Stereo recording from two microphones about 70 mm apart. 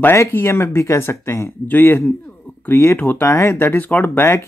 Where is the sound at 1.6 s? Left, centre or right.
Left.